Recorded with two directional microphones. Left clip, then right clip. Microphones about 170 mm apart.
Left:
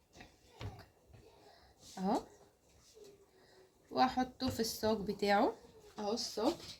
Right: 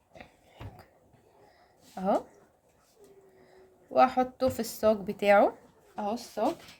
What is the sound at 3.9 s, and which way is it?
Speech, 75° right (ahead or behind).